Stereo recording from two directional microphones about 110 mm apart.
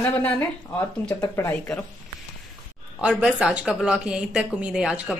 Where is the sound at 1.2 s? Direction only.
30° left (ahead or behind).